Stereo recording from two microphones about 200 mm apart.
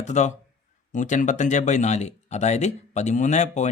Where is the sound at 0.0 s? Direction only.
35° left (ahead or behind).